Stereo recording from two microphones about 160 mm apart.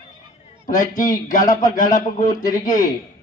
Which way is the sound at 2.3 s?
25° left (ahead or behind).